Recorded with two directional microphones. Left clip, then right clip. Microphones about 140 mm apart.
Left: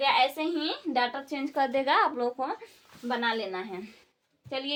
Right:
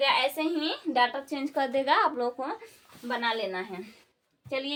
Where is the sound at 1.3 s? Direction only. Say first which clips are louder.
Left 1 dB; 40° left (ahead or behind); by 3.4 s 15° left (ahead or behind).